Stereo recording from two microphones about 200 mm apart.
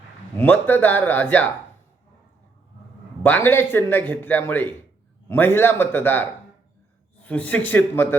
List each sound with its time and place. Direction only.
0.3 s a man's voice: 10° left (ahead or behind)
3.2 s a man's voice: 10° left (ahead or behind)